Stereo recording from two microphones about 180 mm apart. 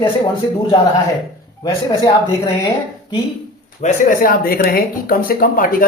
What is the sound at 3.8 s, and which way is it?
Speech, 50° left (ahead or behind).